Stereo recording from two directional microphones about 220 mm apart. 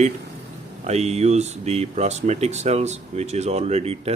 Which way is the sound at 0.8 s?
30° right (ahead or behind).